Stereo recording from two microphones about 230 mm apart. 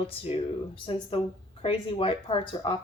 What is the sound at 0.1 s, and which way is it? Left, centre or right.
Speech, left.